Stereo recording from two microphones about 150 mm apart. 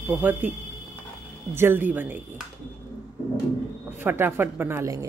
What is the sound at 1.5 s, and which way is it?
Speech, 15° right (ahead or behind).